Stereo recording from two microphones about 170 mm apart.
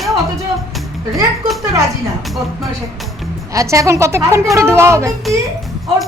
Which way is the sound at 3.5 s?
20° right (ahead or behind).